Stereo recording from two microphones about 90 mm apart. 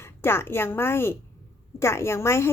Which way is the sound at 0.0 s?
25° left (ahead or behind).